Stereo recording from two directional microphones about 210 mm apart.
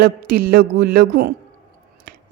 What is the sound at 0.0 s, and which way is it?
Speech, 45° right (ahead or behind).